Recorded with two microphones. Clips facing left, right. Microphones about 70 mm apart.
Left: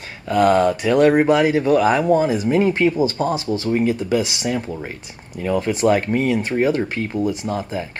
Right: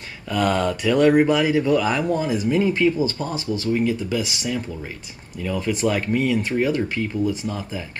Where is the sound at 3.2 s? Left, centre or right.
Left.